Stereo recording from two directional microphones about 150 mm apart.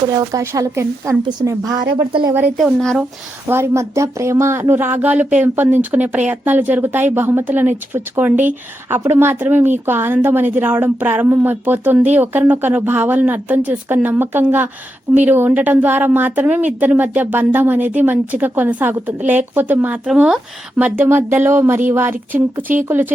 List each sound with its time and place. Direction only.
0.1 s speech: 25° right (ahead or behind)
2.6 s speech: centre (ahead or behind)
3.4 s speech: 15° right (ahead or behind)